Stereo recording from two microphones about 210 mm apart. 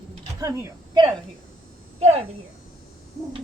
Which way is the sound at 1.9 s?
30° right (ahead or behind).